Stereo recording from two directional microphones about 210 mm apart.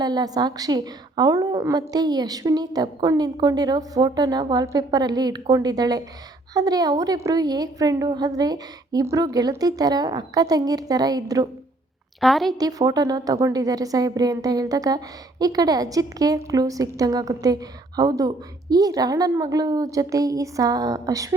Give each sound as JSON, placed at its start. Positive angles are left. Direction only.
{"t": 0.0, "sound": "a woman's voice", "side_deg": -20}
{"t": 12.2, "sound": "a woman's voice", "side_deg": 0}
{"t": 12.5, "sound": "a woman's voice", "side_deg": -20}